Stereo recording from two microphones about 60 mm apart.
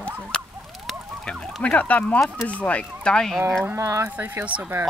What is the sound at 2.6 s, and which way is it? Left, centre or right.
Speech, centre.